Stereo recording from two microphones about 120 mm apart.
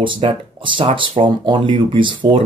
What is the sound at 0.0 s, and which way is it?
Speech, 45° right (ahead or behind).